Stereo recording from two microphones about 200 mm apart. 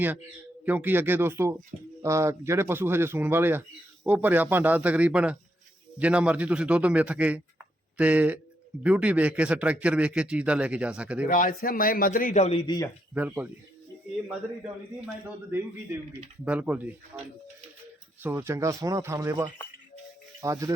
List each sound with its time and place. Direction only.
0.6 s a man's voice: 10° right (ahead or behind)
11.3 s speech: 45° left (ahead or behind); by 12.9 s 20° left (ahead or behind)
13.1 s speech: 10° right (ahead or behind)